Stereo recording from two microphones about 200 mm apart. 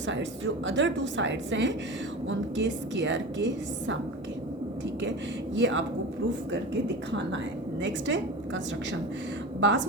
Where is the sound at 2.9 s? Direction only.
65° right (ahead or behind).